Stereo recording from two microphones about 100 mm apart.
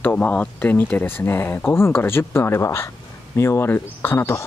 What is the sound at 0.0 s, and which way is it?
Speech, 15° left (ahead or behind).